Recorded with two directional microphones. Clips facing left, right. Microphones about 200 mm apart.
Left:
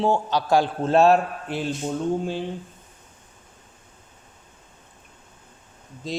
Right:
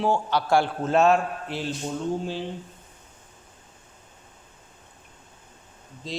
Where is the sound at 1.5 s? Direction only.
50° left (ahead or behind).